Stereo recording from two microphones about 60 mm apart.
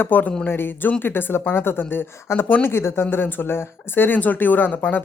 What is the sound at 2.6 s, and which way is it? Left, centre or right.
Speech, left.